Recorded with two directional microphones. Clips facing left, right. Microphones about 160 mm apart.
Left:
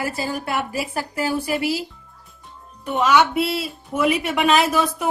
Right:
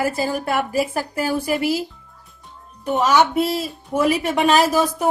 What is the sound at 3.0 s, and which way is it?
A woman's voice, 40° right (ahead or behind).